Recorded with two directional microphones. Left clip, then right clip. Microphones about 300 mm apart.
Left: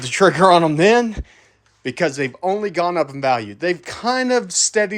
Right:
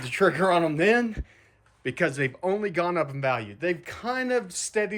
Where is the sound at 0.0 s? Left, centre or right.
Left.